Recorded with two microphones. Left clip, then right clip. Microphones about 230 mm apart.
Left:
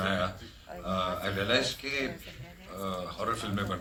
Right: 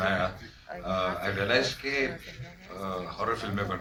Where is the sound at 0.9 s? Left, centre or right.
Left.